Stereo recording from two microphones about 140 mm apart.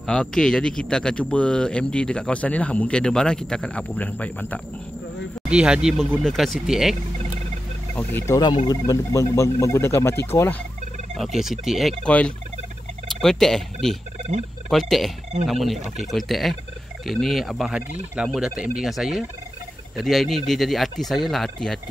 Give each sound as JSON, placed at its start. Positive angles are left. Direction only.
{"t": 0.0, "sound": "a man's voice", "side_deg": 5}
{"t": 5.5, "sound": "speech", "side_deg": -5}
{"t": 7.9, "sound": "a man's voice", "side_deg": 15}
{"t": 8.4, "sound": "speech", "side_deg": 30}
{"t": 11.1, "sound": "speech", "side_deg": 0}